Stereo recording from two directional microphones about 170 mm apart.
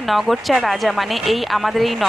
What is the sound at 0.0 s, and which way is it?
A woman's voice, centre (ahead or behind).